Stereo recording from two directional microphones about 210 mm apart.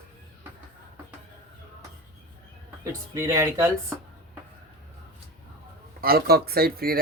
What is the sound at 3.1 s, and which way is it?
Speech, 15° right (ahead or behind).